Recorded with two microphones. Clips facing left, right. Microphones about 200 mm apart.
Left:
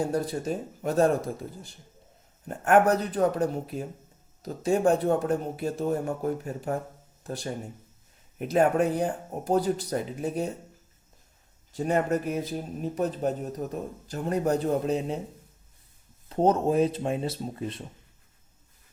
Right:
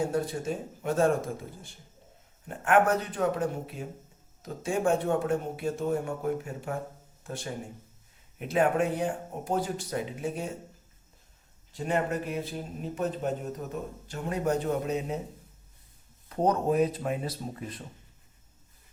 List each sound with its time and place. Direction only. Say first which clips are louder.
0.1 s speech: left 2 dB; 40° left (ahead or behind)
11.8 s speech: left 4 dB; 45° left (ahead or behind)
16.3 s speech: left 3 dB; 25° left (ahead or behind)